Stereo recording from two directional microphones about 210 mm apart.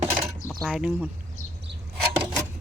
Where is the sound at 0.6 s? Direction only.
5° right (ahead or behind).